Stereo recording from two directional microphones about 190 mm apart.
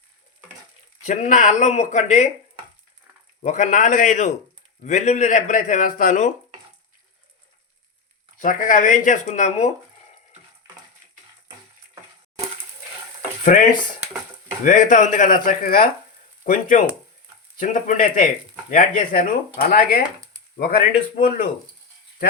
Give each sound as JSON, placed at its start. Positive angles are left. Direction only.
{"t": 1.0, "sound": "speech", "side_deg": 40}
{"t": 3.4, "sound": "speech", "side_deg": 40}
{"t": 8.4, "sound": "speech", "side_deg": 45}
{"t": 13.4, "sound": "speech", "side_deg": 45}